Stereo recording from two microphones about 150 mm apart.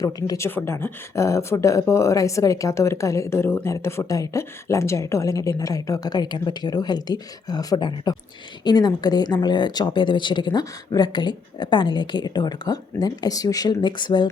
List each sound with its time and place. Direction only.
0.0 s speech: 25° left (ahead or behind)